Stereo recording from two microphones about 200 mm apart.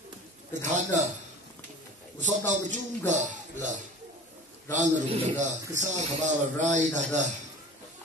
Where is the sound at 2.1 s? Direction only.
40° right (ahead or behind).